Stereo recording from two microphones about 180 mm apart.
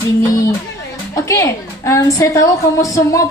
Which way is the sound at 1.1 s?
15° left (ahead or behind).